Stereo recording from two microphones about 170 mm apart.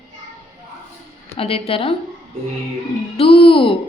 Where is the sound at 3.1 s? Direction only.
35° left (ahead or behind).